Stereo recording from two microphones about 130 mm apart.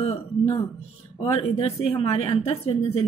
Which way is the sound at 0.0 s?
50° left (ahead or behind).